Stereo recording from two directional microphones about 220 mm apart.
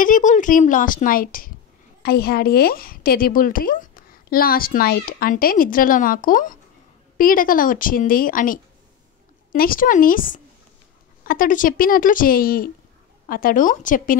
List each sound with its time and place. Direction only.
0.0 s speech: 35° left (ahead or behind)